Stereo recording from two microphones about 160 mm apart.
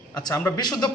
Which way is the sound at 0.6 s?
25° left (ahead or behind).